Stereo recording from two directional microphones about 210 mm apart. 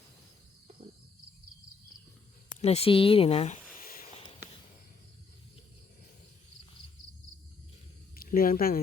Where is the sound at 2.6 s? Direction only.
30° left (ahead or behind).